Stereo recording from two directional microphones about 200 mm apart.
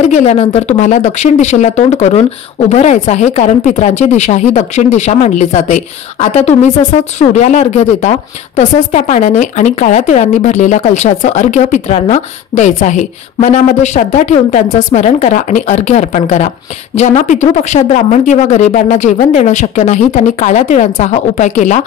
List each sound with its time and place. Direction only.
0.1 s speech: 35° left (ahead or behind)